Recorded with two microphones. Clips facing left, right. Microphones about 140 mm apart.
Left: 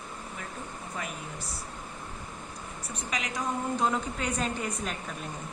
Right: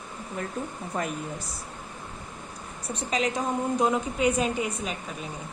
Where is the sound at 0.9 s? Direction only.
50° right (ahead or behind).